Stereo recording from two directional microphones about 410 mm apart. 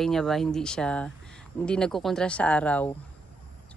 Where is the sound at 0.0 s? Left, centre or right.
Centre.